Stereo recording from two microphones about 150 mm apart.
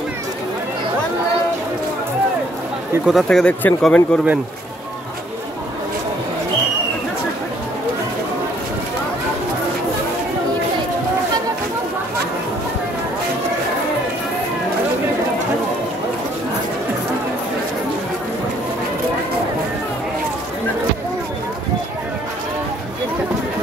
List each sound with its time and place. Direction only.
3.1 s speech: centre (ahead or behind)